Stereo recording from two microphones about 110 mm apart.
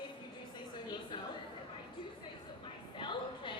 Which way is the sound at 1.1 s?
45° left (ahead or behind).